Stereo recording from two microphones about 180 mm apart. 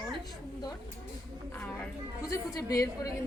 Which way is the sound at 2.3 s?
15° left (ahead or behind).